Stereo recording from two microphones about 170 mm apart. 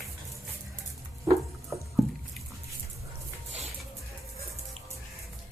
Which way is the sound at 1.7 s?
Centre (ahead or behind).